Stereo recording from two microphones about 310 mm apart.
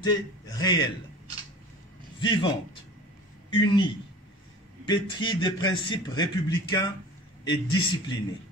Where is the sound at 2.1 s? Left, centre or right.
Centre.